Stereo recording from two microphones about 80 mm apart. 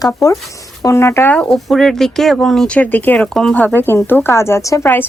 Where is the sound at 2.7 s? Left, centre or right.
Left.